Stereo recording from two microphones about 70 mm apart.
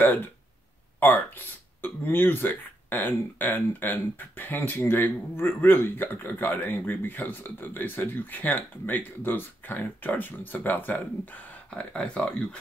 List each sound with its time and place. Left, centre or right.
0.0 s speech: left; by 12.4 s centre